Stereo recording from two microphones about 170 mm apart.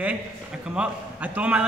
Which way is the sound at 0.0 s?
5° right (ahead or behind).